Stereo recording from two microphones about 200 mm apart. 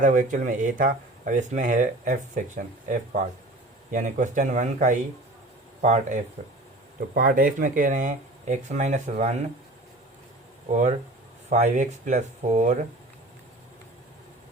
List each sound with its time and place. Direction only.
0.0 s speech: 40° right (ahead or behind)
10.7 s speech: 35° right (ahead or behind)